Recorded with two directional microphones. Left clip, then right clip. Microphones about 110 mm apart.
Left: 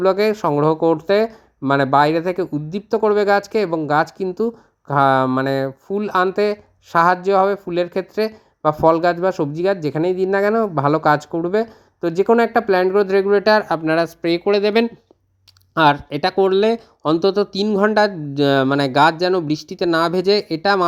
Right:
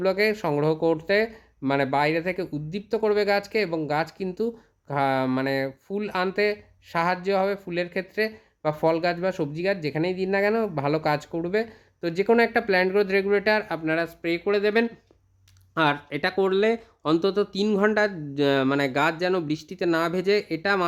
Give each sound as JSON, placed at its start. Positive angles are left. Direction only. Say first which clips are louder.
{"t": 0.0, "sound": "speech", "louder": "left 7 dB", "side_deg": 35}
{"t": 13.5, "sound": "speech", "louder": "left 8 dB", "side_deg": 40}
{"t": 15.7, "sound": "speech", "louder": "left 9 dB", "side_deg": 40}